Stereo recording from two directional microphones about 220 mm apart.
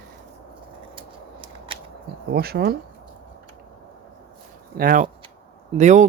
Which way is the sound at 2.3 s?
45° right (ahead or behind).